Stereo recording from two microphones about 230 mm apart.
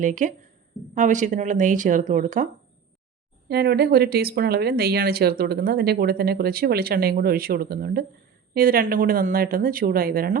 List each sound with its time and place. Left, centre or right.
0.0 s speech: right
3.5 s speech: right